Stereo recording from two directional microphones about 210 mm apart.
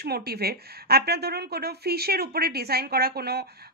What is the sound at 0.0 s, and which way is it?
A woman's voice, 50° right (ahead or behind).